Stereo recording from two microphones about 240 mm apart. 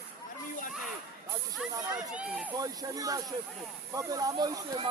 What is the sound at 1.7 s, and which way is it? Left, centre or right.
Speech, centre.